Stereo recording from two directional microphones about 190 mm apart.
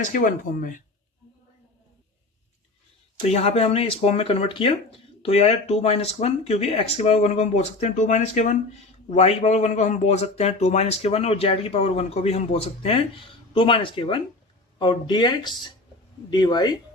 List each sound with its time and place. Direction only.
0.0 s speech: 45° left (ahead or behind)
3.2 s speech: 35° left (ahead or behind)